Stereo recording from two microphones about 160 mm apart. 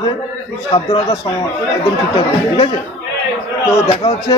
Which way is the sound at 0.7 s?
35° left (ahead or behind).